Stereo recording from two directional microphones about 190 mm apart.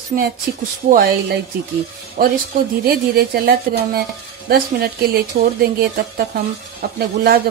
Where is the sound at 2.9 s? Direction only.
55° right (ahead or behind).